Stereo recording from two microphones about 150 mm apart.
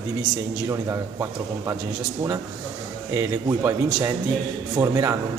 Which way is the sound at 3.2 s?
20° right (ahead or behind).